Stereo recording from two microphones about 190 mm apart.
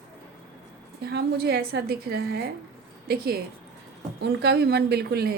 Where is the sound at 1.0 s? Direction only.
55° right (ahead or behind).